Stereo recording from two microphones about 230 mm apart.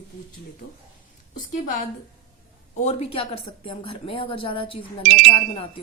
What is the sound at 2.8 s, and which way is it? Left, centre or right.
Speech, left.